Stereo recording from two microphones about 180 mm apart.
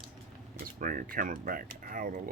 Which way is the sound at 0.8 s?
50° right (ahead or behind).